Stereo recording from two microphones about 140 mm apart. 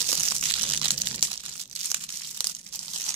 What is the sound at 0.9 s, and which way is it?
Crumpling, 40° right (ahead or behind).